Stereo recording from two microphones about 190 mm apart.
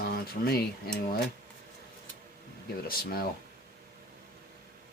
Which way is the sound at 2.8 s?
50° left (ahead or behind).